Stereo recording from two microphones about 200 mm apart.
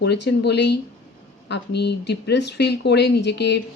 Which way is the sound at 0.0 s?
55° left (ahead or behind).